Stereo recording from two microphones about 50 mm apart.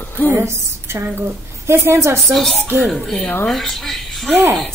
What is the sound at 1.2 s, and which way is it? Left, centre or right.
Speech, right.